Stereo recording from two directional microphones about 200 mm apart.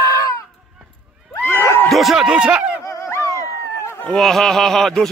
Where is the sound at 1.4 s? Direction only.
10° left (ahead or behind).